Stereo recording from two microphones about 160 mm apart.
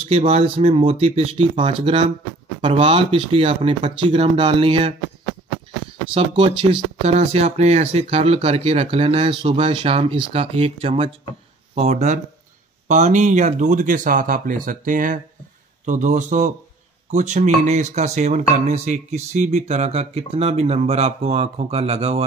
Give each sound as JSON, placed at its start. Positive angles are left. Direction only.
{"t": 0.0, "sound": "speech", "side_deg": -40}
{"t": 6.1, "sound": "speech", "side_deg": -35}